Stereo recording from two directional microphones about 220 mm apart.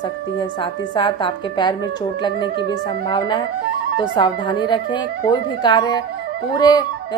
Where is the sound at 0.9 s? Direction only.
20° left (ahead or behind).